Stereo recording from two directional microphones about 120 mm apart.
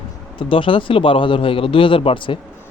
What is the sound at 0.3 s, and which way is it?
Speech, 45° left (ahead or behind).